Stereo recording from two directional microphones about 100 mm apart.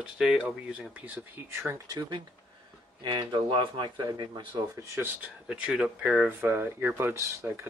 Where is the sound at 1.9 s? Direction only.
50° right (ahead or behind).